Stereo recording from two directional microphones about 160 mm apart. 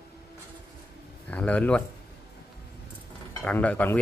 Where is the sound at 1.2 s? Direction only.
10° left (ahead or behind).